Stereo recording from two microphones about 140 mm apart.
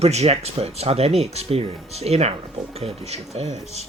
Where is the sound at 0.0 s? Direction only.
50° right (ahead or behind).